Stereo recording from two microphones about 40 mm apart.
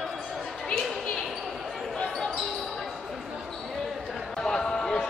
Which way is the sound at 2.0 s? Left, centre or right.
Centre.